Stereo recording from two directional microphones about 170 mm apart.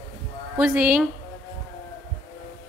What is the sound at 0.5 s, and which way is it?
Speech, 10° right (ahead or behind).